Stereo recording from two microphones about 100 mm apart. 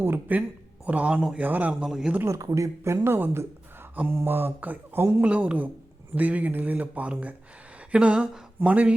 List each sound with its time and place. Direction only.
0.0 s a man's voice: 20° right (ahead or behind)
2.2 s a man's voice: 35° right (ahead or behind); by 8.9 s 15° right (ahead or behind)